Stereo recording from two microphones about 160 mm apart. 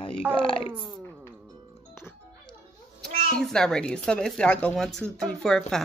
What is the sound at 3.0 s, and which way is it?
A child's voice, 5° left (ahead or behind).